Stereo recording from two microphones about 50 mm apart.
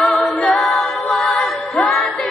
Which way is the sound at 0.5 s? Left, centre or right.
Centre.